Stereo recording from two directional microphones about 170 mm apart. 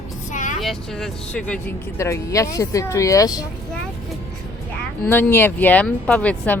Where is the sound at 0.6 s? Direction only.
Centre (ahead or behind).